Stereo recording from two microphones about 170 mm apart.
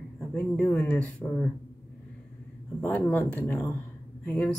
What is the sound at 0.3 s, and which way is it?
Speech, 10° left (ahead or behind).